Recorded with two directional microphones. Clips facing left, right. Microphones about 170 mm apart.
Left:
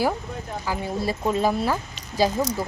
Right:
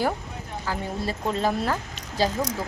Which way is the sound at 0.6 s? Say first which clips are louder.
Left 2 dB; 10° left (ahead or behind).